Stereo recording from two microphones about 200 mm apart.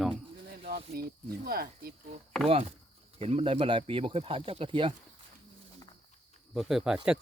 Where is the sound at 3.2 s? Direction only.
30° right (ahead or behind).